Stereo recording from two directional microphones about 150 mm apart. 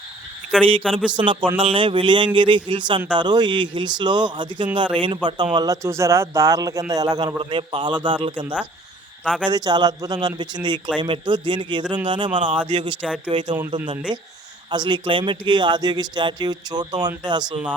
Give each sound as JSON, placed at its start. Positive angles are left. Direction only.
{"t": 1.1, "sound": "a man's voice", "side_deg": -35}